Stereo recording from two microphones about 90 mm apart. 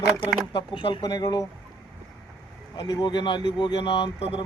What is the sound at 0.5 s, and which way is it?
Speech, 65° left (ahead or behind).